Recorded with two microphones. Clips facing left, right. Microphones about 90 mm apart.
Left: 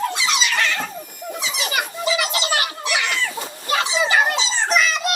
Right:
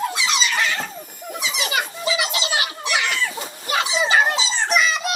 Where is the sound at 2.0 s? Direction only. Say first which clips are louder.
Left 3 dB; 40° left (ahead or behind).